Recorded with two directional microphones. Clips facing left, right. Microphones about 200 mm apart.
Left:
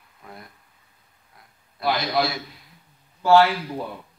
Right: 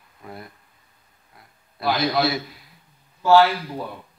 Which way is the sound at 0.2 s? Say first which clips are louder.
Right 5 dB; 5° right (ahead or behind).